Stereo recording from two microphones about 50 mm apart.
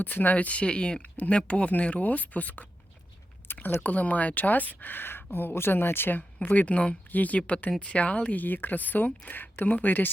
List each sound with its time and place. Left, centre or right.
0.0 s speech: left
3.8 s speech: left
6.1 s speech: left